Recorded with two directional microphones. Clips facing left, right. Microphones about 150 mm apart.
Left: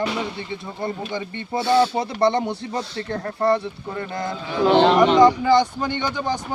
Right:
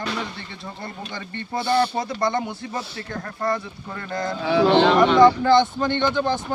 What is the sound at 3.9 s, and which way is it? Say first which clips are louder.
Speech: even; 20° left (ahead or behind).